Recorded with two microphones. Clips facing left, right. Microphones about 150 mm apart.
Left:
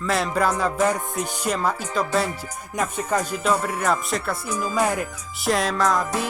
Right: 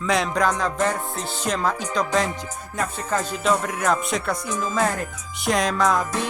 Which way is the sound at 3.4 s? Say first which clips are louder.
Right 3 dB; 5° left (ahead or behind).